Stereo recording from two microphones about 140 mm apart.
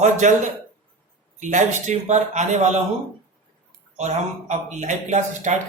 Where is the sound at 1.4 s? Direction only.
60° right (ahead or behind).